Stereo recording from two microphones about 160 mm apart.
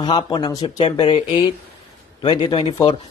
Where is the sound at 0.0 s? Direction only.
30° left (ahead or behind).